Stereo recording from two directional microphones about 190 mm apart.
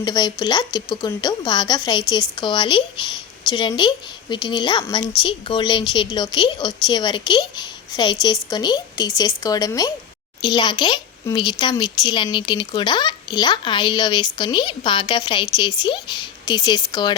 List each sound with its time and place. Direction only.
0.0 s a woman's voice: 20° left (ahead or behind)